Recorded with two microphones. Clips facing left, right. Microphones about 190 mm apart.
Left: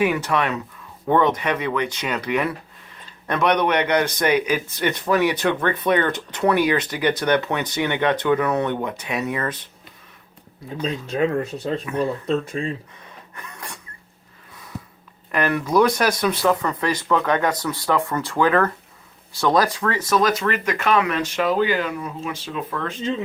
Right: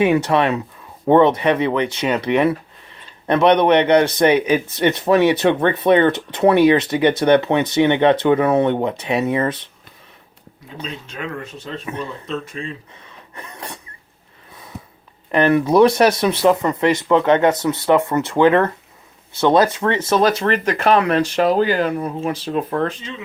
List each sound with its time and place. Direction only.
0.0 s speech: 25° right (ahead or behind)
11.0 s speech: 40° left (ahead or behind)
13.3 s a sound: 25° right (ahead or behind)
15.3 s speech: 25° right (ahead or behind)